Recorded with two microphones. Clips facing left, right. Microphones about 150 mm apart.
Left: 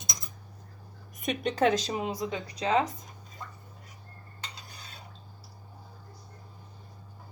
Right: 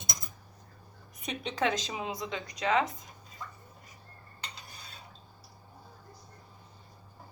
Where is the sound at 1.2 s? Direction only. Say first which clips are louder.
Left 5 dB; 45° left (ahead or behind).